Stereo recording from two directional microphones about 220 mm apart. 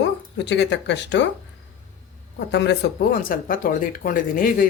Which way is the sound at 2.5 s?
45° left (ahead or behind).